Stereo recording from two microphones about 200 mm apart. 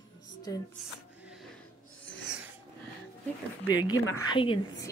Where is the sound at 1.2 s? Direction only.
5° right (ahead or behind).